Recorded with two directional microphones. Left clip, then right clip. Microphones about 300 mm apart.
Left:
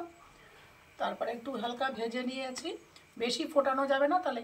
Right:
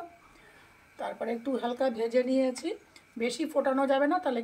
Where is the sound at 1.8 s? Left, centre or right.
Right.